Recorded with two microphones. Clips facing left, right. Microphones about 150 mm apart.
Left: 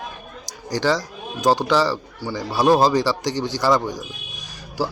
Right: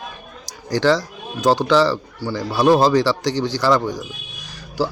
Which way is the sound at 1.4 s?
15° left (ahead or behind).